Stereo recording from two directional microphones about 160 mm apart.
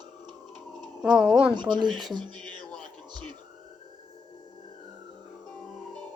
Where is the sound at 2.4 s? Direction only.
5° left (ahead or behind).